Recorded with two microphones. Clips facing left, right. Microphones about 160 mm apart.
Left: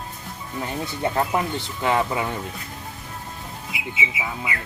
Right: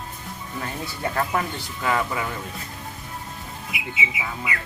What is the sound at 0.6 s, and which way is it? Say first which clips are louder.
Speech: left 4 dB; 20° left (ahead or behind).